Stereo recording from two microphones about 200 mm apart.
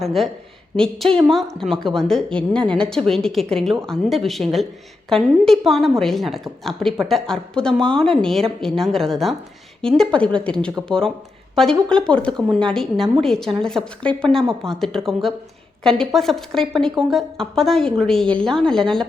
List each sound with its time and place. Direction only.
0.0 s a woman's voice: centre (ahead or behind)